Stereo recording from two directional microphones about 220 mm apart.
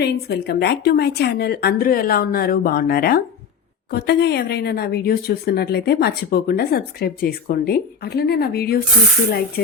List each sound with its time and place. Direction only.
0.0 s speech: 45° left (ahead or behind)